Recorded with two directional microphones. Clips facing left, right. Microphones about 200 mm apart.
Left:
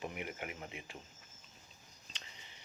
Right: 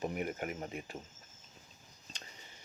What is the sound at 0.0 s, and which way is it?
Speech, 45° right (ahead or behind).